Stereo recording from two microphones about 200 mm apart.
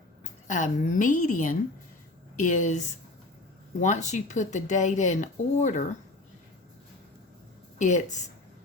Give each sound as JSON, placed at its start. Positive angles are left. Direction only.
{"t": 0.4, "sound": "speech", "side_deg": 40}
{"t": 7.8, "sound": "speech", "side_deg": 35}